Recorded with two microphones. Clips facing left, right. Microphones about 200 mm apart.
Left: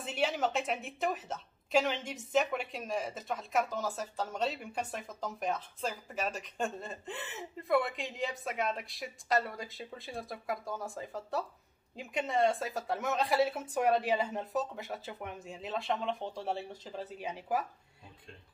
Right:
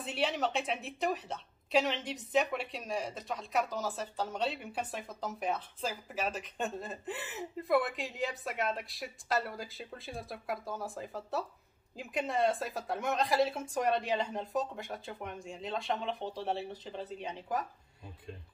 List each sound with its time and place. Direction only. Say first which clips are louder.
0.0 s a woman's voice: left 1 dB; centre (ahead or behind)